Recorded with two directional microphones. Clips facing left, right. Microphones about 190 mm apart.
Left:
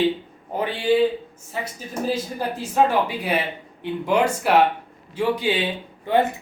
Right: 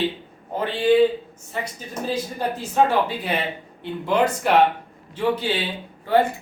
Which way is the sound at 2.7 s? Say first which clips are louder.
Even; 10° left (ahead or behind).